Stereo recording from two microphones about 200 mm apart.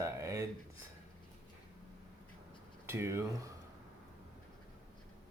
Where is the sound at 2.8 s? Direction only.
15° right (ahead or behind).